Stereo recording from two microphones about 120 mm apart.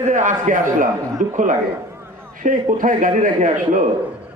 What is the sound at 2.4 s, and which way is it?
A man's voice, 90° right.